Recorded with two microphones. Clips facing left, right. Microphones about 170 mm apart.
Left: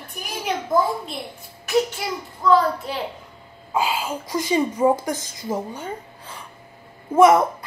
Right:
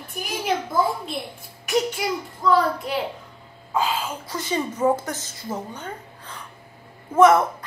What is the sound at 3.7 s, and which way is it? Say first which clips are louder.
A woman's voice: left 1 dB; 10° left (ahead or behind).